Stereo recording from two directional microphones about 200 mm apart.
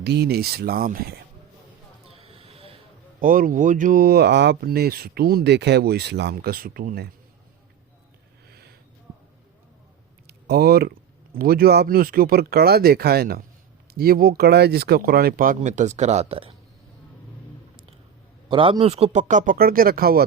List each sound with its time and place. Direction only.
0.0 s speech: 55° right (ahead or behind)
2.0 s a sound: 30° right (ahead or behind)
3.2 s speech: 45° right (ahead or behind)
8.4 s a sound: 50° right (ahead or behind)
10.2 s speech: 50° right (ahead or behind); by 16.5 s 30° right (ahead or behind)
18.4 s speech: 25° right (ahead or behind); by 20.2 s 50° right (ahead or behind)